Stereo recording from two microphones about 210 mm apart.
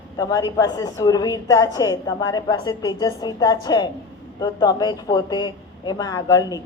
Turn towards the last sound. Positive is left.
turn(degrees=20)  # may be behind; listen again after turning